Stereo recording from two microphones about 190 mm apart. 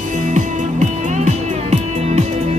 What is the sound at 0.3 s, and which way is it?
Music, 40° right (ahead or behind).